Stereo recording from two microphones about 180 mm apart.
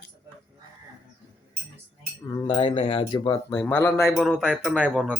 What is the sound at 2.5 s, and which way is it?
Speech, 30° left (ahead or behind).